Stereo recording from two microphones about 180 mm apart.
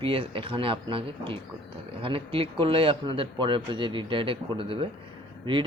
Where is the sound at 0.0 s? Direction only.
30° right (ahead or behind).